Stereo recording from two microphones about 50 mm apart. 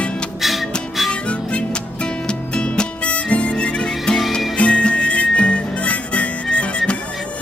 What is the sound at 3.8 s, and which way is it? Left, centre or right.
Music, centre.